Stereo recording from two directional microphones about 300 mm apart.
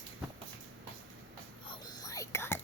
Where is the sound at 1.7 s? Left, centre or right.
Centre.